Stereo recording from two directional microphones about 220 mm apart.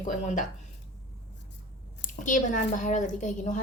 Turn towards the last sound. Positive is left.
turn(degrees=35)  # may be behind; listen again after turning